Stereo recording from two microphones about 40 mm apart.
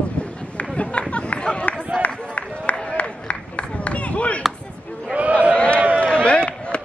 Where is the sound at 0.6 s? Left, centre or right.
Left.